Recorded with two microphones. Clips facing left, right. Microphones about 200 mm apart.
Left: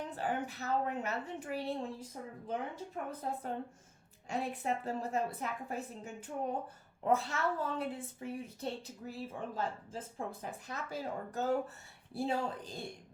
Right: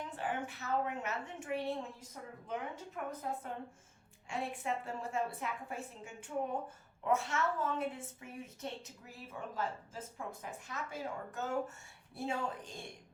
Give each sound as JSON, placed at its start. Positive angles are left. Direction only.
{"t": 0.2, "sound": "speech", "side_deg": 40}